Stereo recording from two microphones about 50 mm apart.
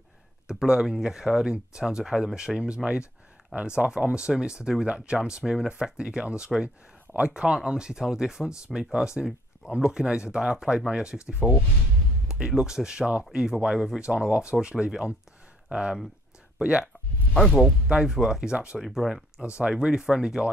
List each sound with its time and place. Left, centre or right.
0.5 s speech: centre
17.6 s speech: centre
18.0 s speech: centre
18.8 s speech: centre